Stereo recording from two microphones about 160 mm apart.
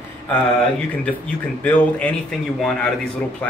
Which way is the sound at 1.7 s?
10° left (ahead or behind).